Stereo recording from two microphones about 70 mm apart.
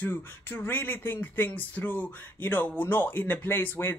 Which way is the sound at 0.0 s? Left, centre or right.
Left.